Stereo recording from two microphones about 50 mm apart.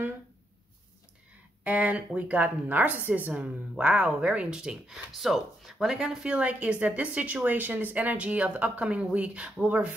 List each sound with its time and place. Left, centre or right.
1.6 s a woman's voice: right; by 6.3 s centre
6.3 s a woman's voice: right